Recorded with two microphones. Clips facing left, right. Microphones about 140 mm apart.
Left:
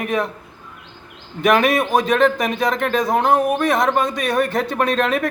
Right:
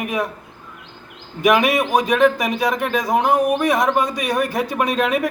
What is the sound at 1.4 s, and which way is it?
A man's voice, 10° right (ahead or behind).